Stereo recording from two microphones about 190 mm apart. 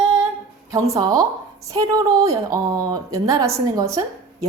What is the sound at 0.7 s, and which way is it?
A woman's voice, 15° right (ahead or behind).